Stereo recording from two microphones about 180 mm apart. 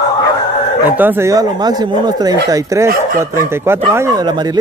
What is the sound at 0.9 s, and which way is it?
Speech, 10° right (ahead or behind).